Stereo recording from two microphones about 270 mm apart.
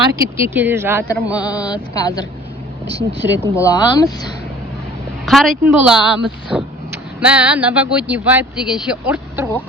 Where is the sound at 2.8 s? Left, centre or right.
Right.